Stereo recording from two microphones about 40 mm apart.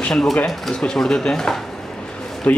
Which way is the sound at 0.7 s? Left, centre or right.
Centre.